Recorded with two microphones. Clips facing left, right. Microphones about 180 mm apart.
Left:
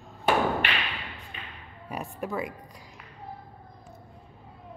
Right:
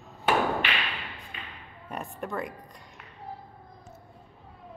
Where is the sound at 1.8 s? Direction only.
Centre (ahead or behind).